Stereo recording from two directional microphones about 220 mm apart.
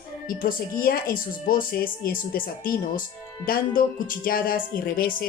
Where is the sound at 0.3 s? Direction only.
40° left (ahead or behind).